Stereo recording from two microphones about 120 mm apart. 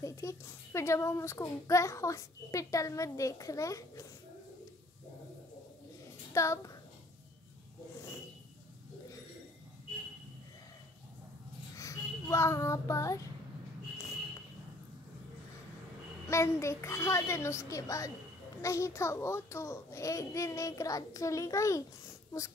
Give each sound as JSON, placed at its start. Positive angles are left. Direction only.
{"t": 0.0, "sound": "a child's voice", "side_deg": 25}
{"t": 6.3, "sound": "a child's voice", "side_deg": 25}
{"t": 11.7, "sound": "a child's voice", "side_deg": 25}
{"t": 16.3, "sound": "a child's voice", "side_deg": 25}